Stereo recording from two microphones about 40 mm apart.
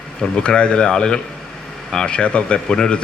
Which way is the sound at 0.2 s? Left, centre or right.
Left.